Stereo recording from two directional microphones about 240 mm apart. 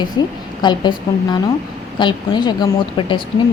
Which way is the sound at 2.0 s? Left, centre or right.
Centre.